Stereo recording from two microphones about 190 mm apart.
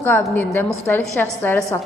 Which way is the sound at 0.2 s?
10° left (ahead or behind).